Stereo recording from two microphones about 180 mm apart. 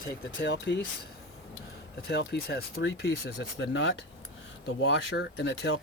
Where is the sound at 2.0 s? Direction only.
70° left (ahead or behind).